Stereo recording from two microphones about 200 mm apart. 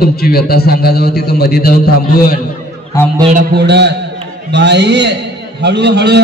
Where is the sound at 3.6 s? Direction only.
55° right (ahead or behind).